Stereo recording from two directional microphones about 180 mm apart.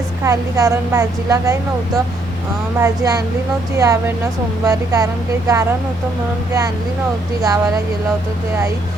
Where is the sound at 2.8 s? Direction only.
20° right (ahead or behind).